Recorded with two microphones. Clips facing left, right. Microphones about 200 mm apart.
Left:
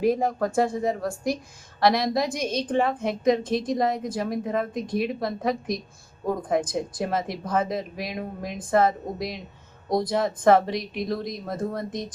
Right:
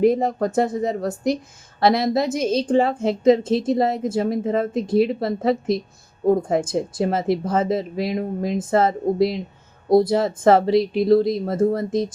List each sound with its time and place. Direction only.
0.0 s a woman's voice: 20° right (ahead or behind)